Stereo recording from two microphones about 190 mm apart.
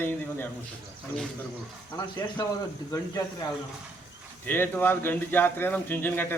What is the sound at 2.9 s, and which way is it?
Speech, 20° left (ahead or behind).